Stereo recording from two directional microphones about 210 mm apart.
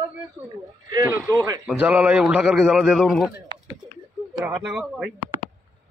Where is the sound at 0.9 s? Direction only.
20° right (ahead or behind); by 3.3 s centre (ahead or behind).